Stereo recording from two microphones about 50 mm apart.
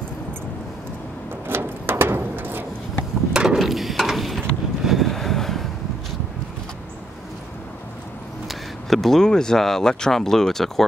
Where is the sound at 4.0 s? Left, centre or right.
Centre.